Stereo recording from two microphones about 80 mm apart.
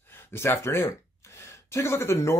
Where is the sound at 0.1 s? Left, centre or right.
Left.